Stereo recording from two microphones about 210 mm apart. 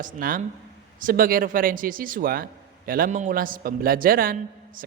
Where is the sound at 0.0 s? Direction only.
40° right (ahead or behind).